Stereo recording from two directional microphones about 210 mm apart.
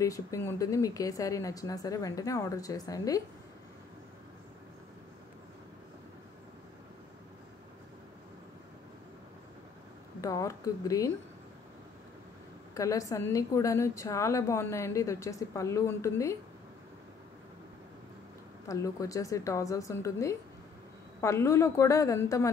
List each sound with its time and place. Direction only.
0.0 s a woman's voice: 15° left (ahead or behind)
10.2 s a woman's voice: 15° left (ahead or behind)
12.7 s a woman's voice: 15° left (ahead or behind)
18.7 s a woman's voice: 15° left (ahead or behind)